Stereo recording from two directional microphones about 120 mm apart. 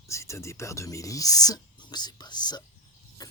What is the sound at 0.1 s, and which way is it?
Speech, 25° left (ahead or behind).